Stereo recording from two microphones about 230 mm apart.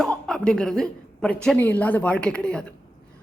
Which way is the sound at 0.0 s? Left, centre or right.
Centre.